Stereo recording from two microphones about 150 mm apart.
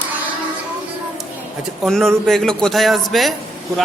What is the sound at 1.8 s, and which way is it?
A man's voice, 5° left (ahead or behind).